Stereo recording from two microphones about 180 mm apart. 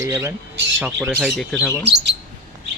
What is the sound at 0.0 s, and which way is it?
Speech, 15° right (ahead or behind).